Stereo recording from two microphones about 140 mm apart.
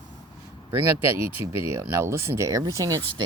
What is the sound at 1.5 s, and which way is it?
Speech, 20° right (ahead or behind).